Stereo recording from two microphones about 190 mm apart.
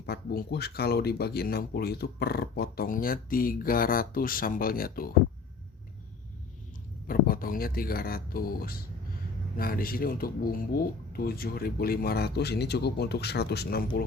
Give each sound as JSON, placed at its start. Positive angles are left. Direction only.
{"t": 0.0, "sound": "speech", "side_deg": 55}
{"t": 7.1, "sound": "speech", "side_deg": 50}